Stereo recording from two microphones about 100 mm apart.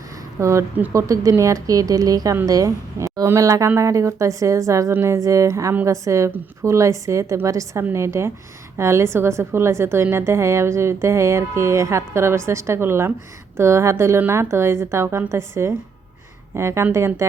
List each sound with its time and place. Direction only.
0.3 s a woman's voice: 30° right (ahead or behind)